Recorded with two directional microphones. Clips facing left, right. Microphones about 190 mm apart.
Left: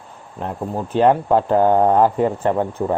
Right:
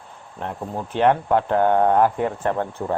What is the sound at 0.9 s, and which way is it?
Speech, 10° left (ahead or behind).